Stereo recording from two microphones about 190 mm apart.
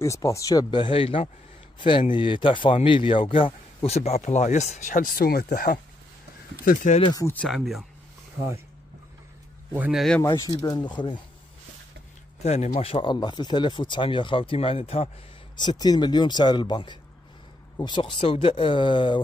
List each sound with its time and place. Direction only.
0.0 s speech: 15° left (ahead or behind); by 7.0 s 45° left (ahead or behind)
7.1 s speech: 15° left (ahead or behind)
7.3 s a man's voice: centre (ahead or behind)
9.7 s a man's voice: 5° right (ahead or behind)
10.2 s speech: 20° left (ahead or behind)
12.4 s speech: 35° left (ahead or behind)
15.5 s speech: 20° left (ahead or behind)